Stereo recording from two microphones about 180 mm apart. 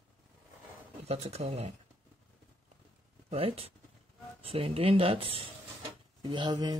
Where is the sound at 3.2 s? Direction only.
35° right (ahead or behind).